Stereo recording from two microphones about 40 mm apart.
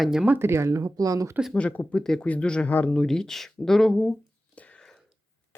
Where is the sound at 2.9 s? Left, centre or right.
Centre.